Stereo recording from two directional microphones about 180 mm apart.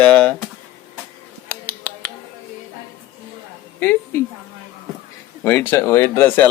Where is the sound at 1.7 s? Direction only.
10° left (ahead or behind).